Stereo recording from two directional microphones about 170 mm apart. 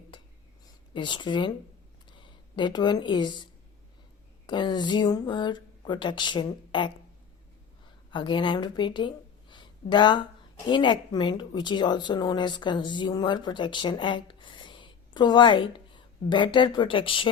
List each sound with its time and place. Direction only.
0.9 s speech: 30° left (ahead or behind)
8.1 s a woman's voice: 30° left (ahead or behind)